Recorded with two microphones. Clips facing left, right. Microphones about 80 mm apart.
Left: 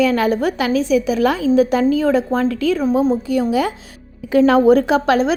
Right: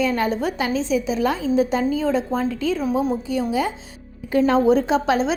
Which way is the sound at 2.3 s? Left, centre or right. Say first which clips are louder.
Left 5 dB; left.